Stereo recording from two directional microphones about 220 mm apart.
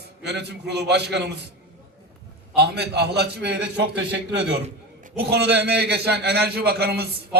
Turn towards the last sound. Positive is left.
turn(degrees=-45)  # may be behind; listen again after turning